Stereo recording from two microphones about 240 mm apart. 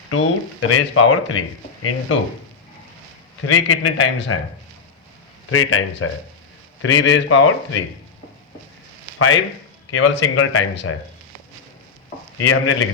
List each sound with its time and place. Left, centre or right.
0.1 s speech: left
3.4 s speech: left
5.5 s speech: left
9.1 s speech: left
12.4 s speech: left